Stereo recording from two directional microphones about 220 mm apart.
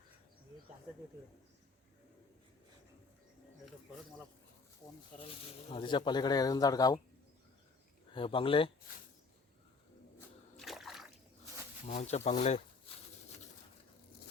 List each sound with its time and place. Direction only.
4.8 s speech: 15° left (ahead or behind)
8.1 s speech: 25° left (ahead or behind)
10.6 s splash: centre (ahead or behind)
11.9 s speech: 30° left (ahead or behind)